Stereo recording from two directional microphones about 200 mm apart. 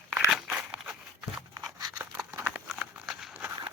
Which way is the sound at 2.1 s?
5° right (ahead or behind).